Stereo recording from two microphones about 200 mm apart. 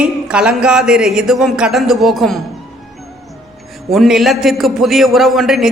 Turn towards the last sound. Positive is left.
turn(degrees=0)  # may be behind; listen again after turning